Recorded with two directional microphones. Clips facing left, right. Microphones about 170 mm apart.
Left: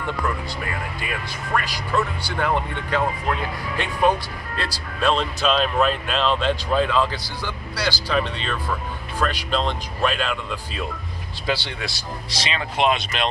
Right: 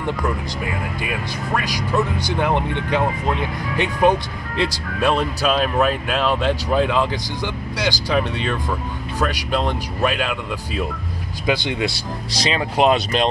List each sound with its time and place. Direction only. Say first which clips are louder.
1.5 s speech: right 1 dB; 15° right (ahead or behind)
12.4 s speech: right 5 dB; 40° right (ahead or behind)